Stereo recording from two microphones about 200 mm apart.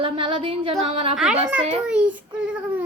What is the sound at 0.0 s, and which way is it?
Speech, 25° right (ahead or behind).